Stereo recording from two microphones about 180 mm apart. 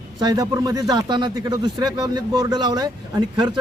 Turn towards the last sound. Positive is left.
turn(degrees=-25)  # may be behind; listen again after turning